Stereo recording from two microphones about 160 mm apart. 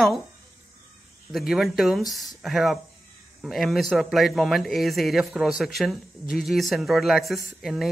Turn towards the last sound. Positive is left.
turn(degrees=0)  # may be behind; listen again after turning